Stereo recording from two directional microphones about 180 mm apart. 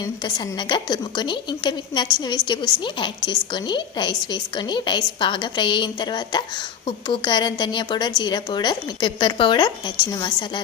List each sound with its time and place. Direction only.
0.0 s a woman's voice: 20° left (ahead or behind)